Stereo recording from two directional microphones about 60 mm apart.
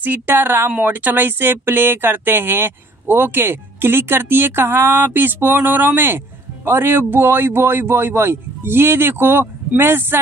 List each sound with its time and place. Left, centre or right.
0.0 s speech: right